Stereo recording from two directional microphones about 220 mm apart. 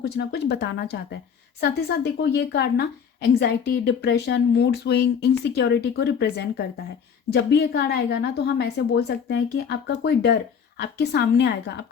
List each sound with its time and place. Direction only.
0.0 s a woman's voice: 50° left (ahead or behind)